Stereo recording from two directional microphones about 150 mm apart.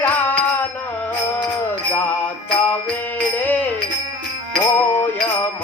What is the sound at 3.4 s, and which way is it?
Music, 10° left (ahead or behind).